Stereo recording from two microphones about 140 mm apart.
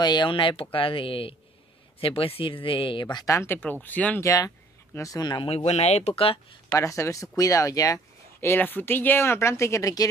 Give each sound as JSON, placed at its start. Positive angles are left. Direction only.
{"t": 0.0, "sound": "speech", "side_deg": 30}
{"t": 3.3, "sound": "speech", "side_deg": 15}
{"t": 4.9, "sound": "speech", "side_deg": 25}
{"t": 5.5, "sound": "speech", "side_deg": 45}
{"t": 6.7, "sound": "speech", "side_deg": 20}